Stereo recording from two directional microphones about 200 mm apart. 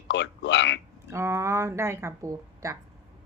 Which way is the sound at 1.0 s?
15° right (ahead or behind).